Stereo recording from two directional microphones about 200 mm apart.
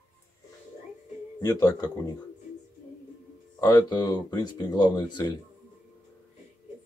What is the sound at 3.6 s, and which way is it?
Speech, 20° left (ahead or behind).